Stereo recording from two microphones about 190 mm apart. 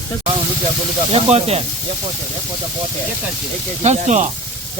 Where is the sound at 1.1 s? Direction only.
35° right (ahead or behind).